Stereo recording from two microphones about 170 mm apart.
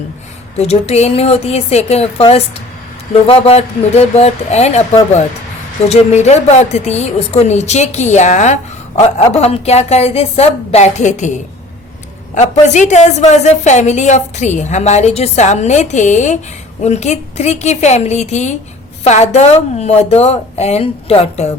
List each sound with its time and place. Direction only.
0.5 s a woman's voice: 40° left (ahead or behind)
5.9 s a woman's voice: 40° left (ahead or behind)